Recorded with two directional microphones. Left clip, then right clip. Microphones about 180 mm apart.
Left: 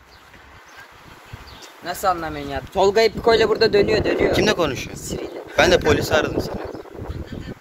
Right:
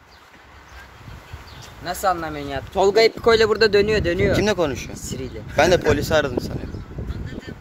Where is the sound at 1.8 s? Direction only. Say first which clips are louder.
Even; 10° right (ahead or behind).